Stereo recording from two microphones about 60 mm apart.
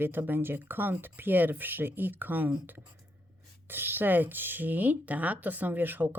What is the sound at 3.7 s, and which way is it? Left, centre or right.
Speech, right.